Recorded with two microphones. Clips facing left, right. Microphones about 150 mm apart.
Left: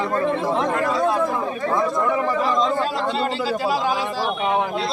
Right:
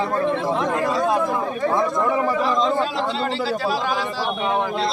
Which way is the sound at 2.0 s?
20° right (ahead or behind).